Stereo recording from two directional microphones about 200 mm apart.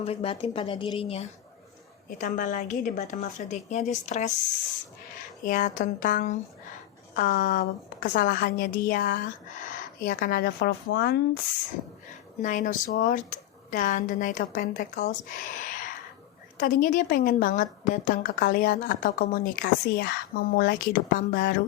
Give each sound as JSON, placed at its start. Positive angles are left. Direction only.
{"t": 0.0, "sound": "a woman's voice", "side_deg": 30}
{"t": 2.0, "sound": "speech", "side_deg": 40}
{"t": 5.5, "sound": "a woman's voice", "side_deg": 40}
{"t": 10.8, "sound": "speech", "side_deg": 60}
{"t": 12.4, "sound": "a woman's voice", "side_deg": 40}